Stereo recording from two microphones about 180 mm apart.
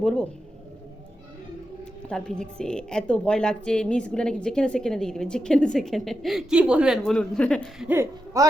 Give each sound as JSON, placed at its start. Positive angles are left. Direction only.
{"t": 0.0, "sound": "a woman's voice", "side_deg": 5}
{"t": 2.0, "sound": "a woman's voice", "side_deg": 5}
{"t": 7.9, "sound": "speech", "side_deg": -15}